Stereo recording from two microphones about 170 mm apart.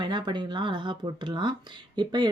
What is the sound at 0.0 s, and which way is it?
Speech, 30° right (ahead or behind).